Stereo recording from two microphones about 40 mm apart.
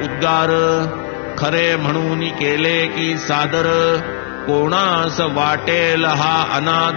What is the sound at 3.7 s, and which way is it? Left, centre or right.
Music, centre.